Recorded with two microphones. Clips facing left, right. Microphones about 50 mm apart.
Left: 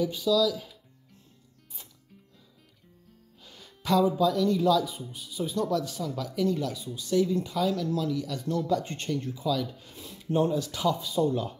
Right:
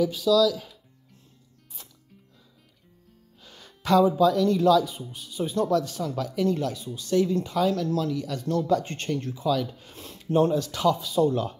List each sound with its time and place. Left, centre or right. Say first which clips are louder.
0.0 s speech: right 4 dB; right
3.4 s speech: right 3 dB; right